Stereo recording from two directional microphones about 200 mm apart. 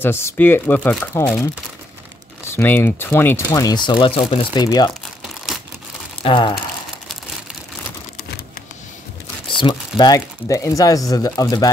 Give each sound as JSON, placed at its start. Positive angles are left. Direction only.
{"t": 0.0, "sound": "speech", "side_deg": 10}
{"t": 6.2, "sound": "speech", "side_deg": 25}
{"t": 9.5, "sound": "speech", "side_deg": 25}